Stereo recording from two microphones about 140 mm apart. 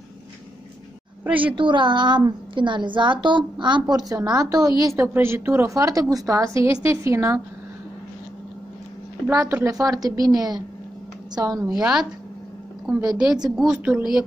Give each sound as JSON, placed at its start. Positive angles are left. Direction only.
{"t": 1.2, "sound": "a woman's voice", "side_deg": -10}
{"t": 1.5, "sound": "a woman's voice", "side_deg": -35}
{"t": 9.3, "sound": "a woman's voice", "side_deg": -25}
{"t": 11.7, "sound": "speech", "side_deg": -5}